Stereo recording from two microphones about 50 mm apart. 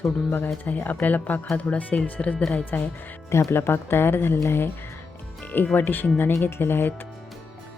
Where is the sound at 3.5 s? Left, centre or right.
Left.